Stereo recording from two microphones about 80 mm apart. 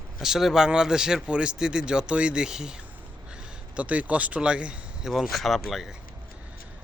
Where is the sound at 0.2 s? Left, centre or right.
Centre.